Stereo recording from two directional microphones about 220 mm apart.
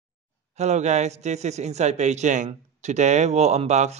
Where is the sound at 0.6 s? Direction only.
30° right (ahead or behind).